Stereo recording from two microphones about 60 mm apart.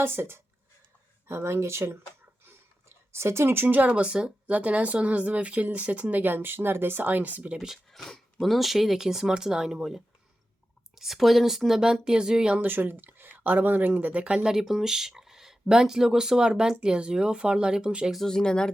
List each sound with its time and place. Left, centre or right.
0.0 s speech: right
3.1 s speech: right
7.9 s speech: centre
12.6 s speech: right
14.4 s speech: centre
18.1 s speech: centre